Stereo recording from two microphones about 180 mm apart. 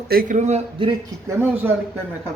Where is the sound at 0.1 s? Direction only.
50° right (ahead or behind); by 0.9 s 35° right (ahead or behind).